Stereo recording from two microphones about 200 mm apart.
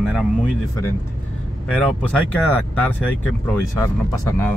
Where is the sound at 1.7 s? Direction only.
5° left (ahead or behind).